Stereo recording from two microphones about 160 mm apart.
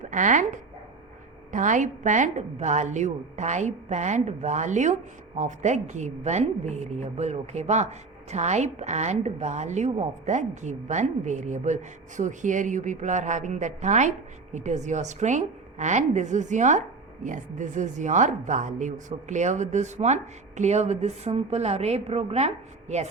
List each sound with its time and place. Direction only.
0.0 s a woman's voice: 50° right (ahead or behind)